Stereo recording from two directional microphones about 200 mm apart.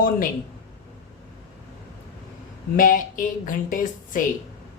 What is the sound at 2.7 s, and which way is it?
Speech, 45° left (ahead or behind).